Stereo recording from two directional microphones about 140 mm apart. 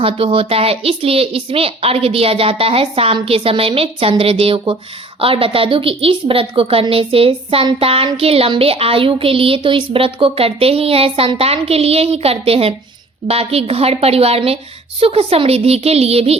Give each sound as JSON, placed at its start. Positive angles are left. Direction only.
{"t": 0.0, "sound": "a woman's voice", "side_deg": -40}